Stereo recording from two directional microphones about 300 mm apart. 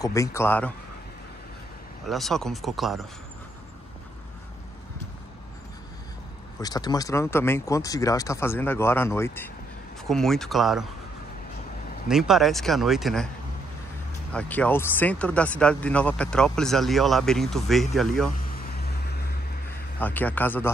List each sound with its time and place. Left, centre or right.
0.0 s speech: centre
2.0 s speech: centre
6.6 s speech: centre
12.1 s speech: centre
14.3 s speech: centre
18.5 s vehicle: left
20.0 s speech: centre